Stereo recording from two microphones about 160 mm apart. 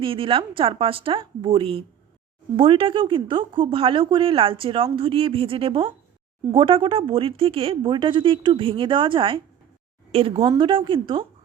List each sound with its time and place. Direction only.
0.0 s speech: 35° right (ahead or behind)